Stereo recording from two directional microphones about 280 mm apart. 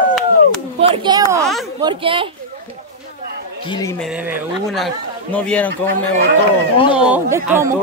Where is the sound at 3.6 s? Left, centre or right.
Centre.